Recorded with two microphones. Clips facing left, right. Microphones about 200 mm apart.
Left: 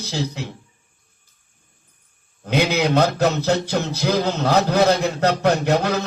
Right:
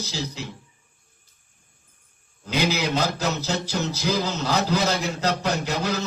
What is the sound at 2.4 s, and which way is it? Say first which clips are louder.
A man's voice: left 5 dB; 60° left (ahead or behind).